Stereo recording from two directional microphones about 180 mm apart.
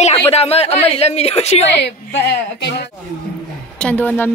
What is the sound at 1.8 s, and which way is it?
A woman's voice, 70° left (ahead or behind).